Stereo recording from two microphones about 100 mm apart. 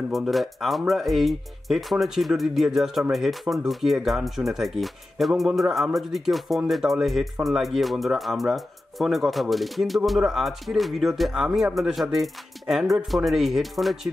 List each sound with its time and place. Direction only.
0.1 s speech: centre (ahead or behind)